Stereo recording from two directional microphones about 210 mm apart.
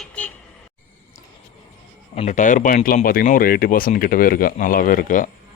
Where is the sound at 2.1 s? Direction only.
35° left (ahead or behind).